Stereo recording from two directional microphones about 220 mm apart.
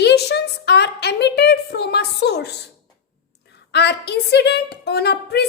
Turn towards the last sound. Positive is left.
turn(degrees=50)  # may be behind; listen again after turning